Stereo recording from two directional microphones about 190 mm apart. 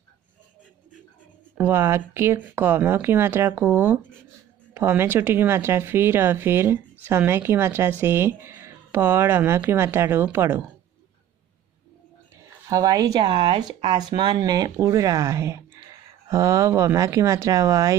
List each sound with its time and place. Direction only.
1.6 s speech: 15° right (ahead or behind)
12.6 s speech: 20° right (ahead or behind)